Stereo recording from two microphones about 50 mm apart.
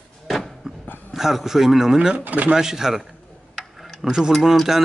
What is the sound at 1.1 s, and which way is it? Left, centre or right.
Speech, centre.